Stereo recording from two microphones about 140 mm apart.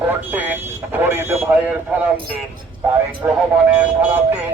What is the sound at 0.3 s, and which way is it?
Speech, 15° right (ahead or behind).